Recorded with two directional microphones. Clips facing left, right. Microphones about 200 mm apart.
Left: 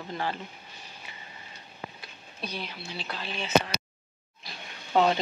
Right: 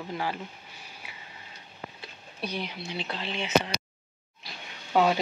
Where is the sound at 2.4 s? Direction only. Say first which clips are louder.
Right 3 dB; 15° right (ahead or behind).